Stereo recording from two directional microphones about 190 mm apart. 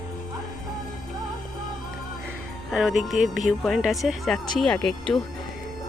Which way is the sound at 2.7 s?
5° right (ahead or behind).